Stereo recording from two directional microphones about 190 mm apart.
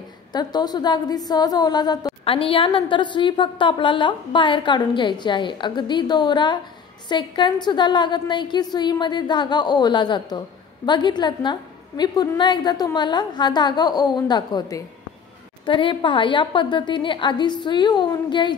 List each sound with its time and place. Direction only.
0.3 s a woman's voice: 20° left (ahead or behind)